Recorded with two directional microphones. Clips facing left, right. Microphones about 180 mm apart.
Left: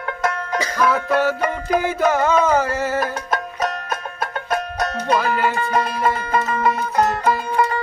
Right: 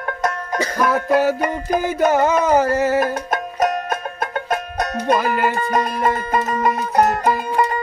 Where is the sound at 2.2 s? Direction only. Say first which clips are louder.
Right 1 dB; 15° right (ahead or behind).